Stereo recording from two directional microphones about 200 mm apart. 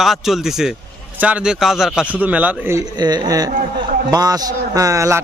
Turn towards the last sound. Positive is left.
turn(degrees=-15)  # may be behind; listen again after turning